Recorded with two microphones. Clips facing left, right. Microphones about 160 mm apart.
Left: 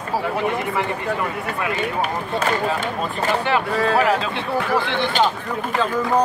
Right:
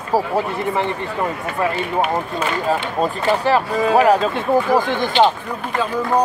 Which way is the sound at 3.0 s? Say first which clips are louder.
Right 4 dB; 35° right (ahead or behind).